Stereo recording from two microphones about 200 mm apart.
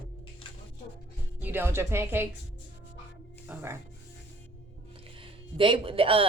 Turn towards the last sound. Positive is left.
turn(degrees=-25)  # may be behind; listen again after turning